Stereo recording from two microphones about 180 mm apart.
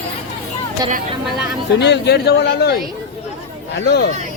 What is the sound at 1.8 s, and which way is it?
Speech, 70° left (ahead or behind).